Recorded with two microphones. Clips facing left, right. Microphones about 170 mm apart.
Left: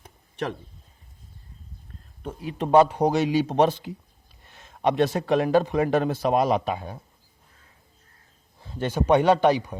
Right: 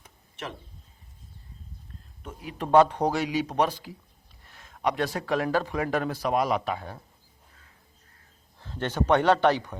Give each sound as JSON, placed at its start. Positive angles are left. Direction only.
{"t": 0.0, "sound": "a sound", "side_deg": 35}
{"t": 2.2, "sound": "a man's voice", "side_deg": 30}
{"t": 2.7, "sound": "a man's voice", "side_deg": 10}
{"t": 3.2, "sound": "a man's voice", "side_deg": 30}
{"t": 8.5, "sound": "a man's voice", "side_deg": 10}